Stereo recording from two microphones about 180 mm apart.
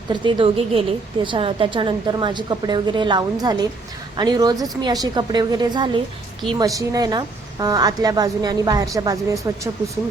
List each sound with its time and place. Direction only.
0.1 s a woman's voice: 25° right (ahead or behind)